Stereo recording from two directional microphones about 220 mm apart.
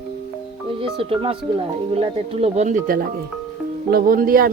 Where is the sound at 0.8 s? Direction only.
25° right (ahead or behind).